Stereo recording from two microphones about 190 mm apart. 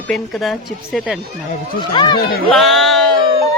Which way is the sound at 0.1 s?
Centre (ahead or behind).